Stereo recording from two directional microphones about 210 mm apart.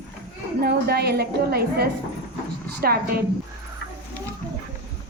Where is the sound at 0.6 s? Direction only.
50° right (ahead or behind).